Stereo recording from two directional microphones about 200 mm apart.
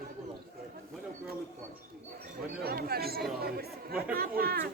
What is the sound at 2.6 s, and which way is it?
Speech, 50° right (ahead or behind).